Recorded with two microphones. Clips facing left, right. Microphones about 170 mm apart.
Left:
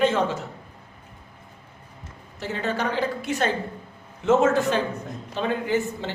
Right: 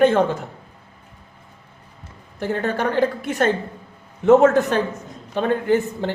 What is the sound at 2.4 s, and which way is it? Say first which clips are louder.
A woman's voice: right 5 dB; 55° right (ahead or behind).